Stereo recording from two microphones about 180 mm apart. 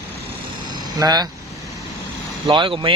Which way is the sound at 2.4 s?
30° right (ahead or behind).